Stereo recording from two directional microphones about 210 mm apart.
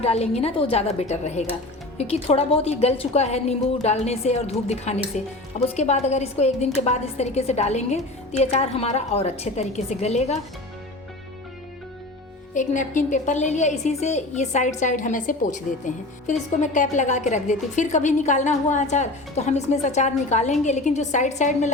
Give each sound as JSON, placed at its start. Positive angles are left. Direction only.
{"t": 0.0, "sound": "a woman's voice", "side_deg": 30}
{"t": 12.5, "sound": "a woman's voice", "side_deg": 35}